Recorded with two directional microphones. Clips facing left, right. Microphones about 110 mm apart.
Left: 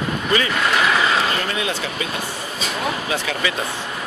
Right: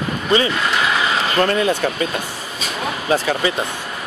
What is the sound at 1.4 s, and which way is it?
Speech, 45° right (ahead or behind).